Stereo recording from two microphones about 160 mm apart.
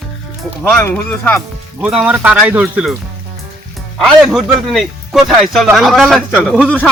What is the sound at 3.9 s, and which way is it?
Speech, centre (ahead or behind).